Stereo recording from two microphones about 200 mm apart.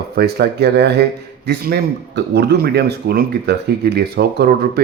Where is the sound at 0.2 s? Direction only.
55° right (ahead or behind).